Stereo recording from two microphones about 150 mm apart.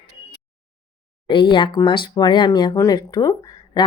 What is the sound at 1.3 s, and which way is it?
Speech, 35° left (ahead or behind).